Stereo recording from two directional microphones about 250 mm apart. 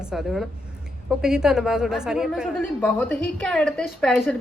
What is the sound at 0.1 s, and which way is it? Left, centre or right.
A woman's voice, centre.